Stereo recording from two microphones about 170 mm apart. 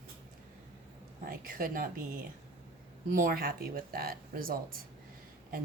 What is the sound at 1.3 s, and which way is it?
Speech, 55° right (ahead or behind).